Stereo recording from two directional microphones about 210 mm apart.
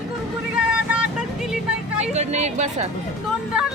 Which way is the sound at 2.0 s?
30° right (ahead or behind).